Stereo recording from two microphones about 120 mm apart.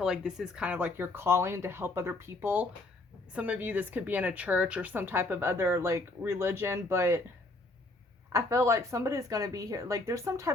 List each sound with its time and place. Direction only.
0.0 s a woman's voice: 5° right (ahead or behind); by 7.2 s 25° right (ahead or behind)
8.3 s speech: 25° right (ahead or behind)